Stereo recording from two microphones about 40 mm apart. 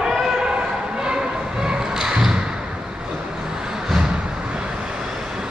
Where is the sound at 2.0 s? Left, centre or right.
Centre.